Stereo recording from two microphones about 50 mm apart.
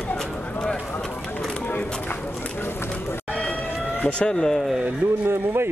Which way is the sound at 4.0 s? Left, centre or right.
Left.